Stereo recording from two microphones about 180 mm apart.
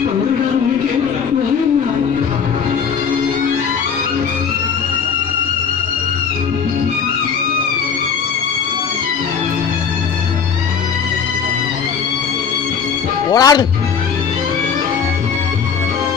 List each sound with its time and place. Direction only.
13.3 s speech: 20° left (ahead or behind)